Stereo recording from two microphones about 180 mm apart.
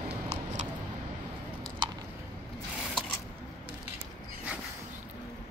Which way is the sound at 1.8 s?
25° right (ahead or behind).